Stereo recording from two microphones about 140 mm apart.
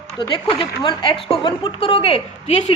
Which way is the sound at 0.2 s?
35° left (ahead or behind).